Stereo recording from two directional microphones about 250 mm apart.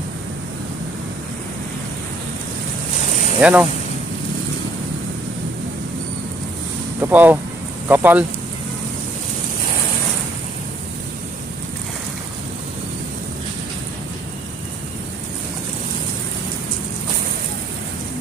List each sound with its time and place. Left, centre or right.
3.1 s vehicle: left
3.3 s speech: centre
7.0 s speech: centre